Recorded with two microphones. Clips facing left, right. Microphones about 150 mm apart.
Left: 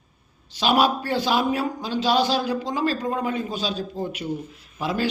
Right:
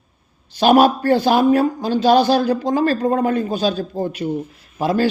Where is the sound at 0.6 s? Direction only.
45° right (ahead or behind).